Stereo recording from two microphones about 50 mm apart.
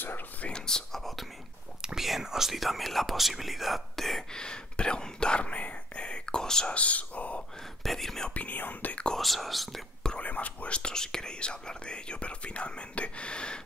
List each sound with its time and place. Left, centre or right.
0.5 s speech: centre
1.8 s whispering: centre
2.0 s speech: centre
4.3 s whispering: centre
6.7 s a sound: left
7.8 s whispering: centre
8.4 s speech: left
9.2 s speech: centre
10.1 s speech: left
10.8 s speech: centre